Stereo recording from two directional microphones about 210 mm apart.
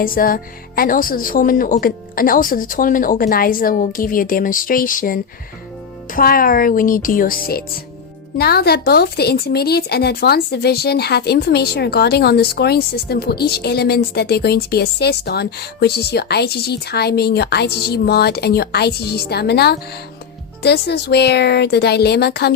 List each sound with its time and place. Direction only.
0.0 s a woman's voice: 45° left (ahead or behind)